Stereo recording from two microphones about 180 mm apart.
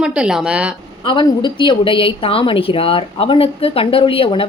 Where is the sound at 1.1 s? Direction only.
25° left (ahead or behind).